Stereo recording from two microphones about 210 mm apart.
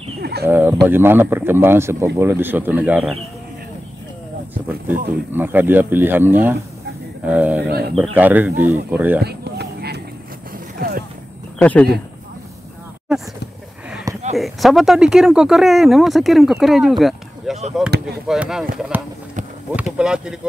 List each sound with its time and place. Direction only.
0.2 s a sound: 50° right (ahead or behind)
0.5 s speech: 10° right (ahead or behind)
5.3 s speech: 10° right (ahead or behind)
9.2 s honk: 50° right (ahead or behind)
10.8 s a sound: 45° right (ahead or behind)
11.5 s speech: 5° left (ahead or behind)
13.1 s speech: 5° right (ahead or behind)
14.3 s speech: centre (ahead or behind)